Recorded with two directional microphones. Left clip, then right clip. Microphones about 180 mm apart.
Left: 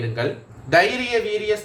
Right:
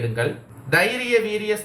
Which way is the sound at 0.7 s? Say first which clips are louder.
Left 1 dB; 40° left (ahead or behind).